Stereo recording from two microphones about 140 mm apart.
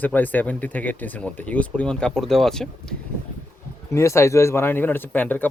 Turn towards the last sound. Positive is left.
turn(degrees=15)  # may be behind; listen again after turning